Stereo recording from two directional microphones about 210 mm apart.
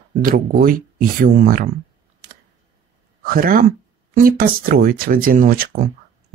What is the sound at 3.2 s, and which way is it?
Speech, 45° right (ahead or behind).